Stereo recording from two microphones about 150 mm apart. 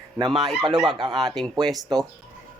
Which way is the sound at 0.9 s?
30° right (ahead or behind).